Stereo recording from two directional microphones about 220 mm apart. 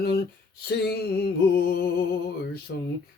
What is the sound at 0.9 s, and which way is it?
Music, 45° left (ahead or behind).